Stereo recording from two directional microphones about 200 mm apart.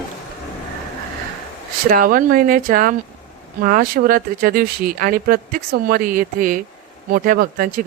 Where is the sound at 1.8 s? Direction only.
45° right (ahead or behind).